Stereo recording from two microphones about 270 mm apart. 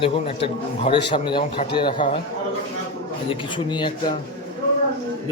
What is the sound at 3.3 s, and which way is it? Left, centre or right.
Speech, centre.